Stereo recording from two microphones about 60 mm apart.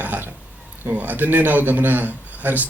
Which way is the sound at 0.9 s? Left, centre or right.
Right.